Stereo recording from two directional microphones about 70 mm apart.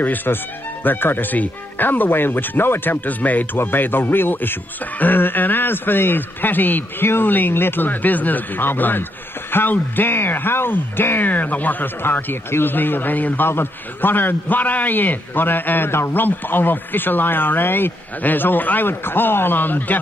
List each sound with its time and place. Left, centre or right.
0.0 s speech: left